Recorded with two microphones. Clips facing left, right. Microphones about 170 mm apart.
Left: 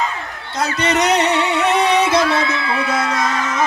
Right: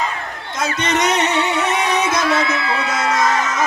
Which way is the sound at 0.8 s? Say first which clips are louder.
Left 2 dB; 35° left (ahead or behind).